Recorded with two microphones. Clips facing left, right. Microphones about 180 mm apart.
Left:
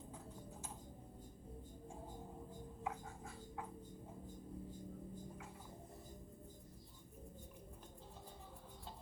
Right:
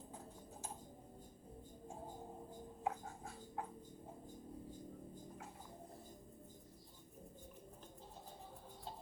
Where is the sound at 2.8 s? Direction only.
40° right (ahead or behind).